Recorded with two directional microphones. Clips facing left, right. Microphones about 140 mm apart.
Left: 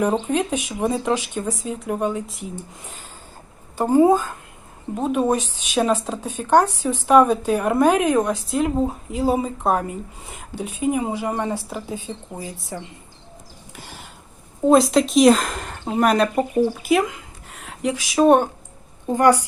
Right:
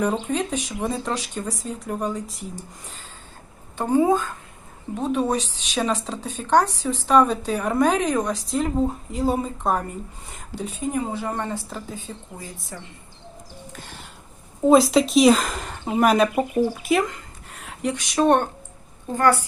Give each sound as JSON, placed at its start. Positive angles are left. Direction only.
{"t": 0.3, "sound": "speech", "side_deg": 10}
{"t": 3.8, "sound": "speech", "side_deg": 5}
{"t": 12.1, "sound": "speech", "side_deg": 25}
{"t": 14.7, "sound": "speech", "side_deg": 0}
{"t": 19.1, "sound": "speech", "side_deg": 20}